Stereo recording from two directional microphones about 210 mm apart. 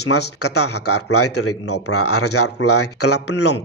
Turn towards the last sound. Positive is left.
turn(degrees=90)